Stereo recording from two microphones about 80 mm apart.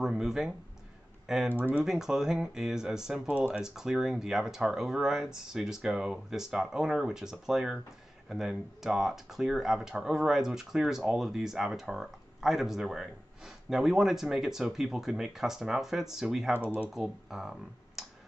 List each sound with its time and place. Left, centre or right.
0.0 s speech: centre
1.6 s speech: centre
1.9 s speech: centre
16.5 s speech: centre
16.9 s speech: centre